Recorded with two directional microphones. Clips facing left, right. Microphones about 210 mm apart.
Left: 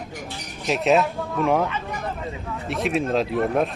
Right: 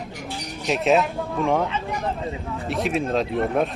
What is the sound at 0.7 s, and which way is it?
Speech, centre (ahead or behind).